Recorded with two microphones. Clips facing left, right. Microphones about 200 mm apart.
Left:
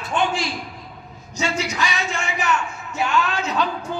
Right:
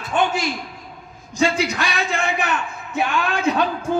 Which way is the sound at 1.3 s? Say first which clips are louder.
Right 5 dB; 55° right (ahead or behind).